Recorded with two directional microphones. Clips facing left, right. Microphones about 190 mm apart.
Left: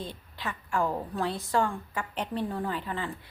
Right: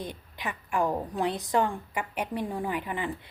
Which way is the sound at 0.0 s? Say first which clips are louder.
Right 1 dB; 15° right (ahead or behind).